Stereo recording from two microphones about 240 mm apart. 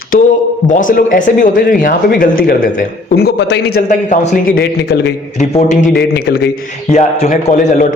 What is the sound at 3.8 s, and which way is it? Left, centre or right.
A man's voice, left.